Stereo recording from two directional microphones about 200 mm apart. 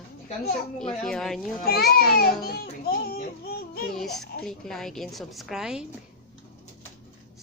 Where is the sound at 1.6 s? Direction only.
50° left (ahead or behind).